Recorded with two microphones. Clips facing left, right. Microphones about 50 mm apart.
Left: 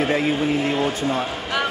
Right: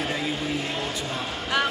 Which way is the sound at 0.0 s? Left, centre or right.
Left.